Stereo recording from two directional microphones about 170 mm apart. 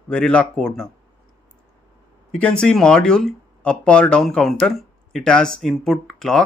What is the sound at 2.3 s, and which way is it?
Speech, 5° left (ahead or behind).